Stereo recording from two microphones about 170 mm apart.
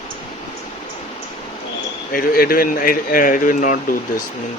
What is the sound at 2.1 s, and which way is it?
Speech, 60° left (ahead or behind).